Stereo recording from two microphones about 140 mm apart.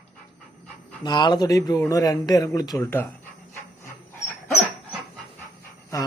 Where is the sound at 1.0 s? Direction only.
30° left (ahead or behind).